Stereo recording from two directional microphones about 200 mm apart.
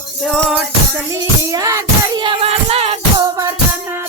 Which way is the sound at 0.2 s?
Centre (ahead or behind).